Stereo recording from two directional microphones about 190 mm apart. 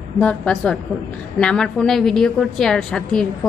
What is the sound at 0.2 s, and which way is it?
A woman's voice, 5° left (ahead or behind).